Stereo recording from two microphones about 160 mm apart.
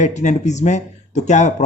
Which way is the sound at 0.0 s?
50° left (ahead or behind).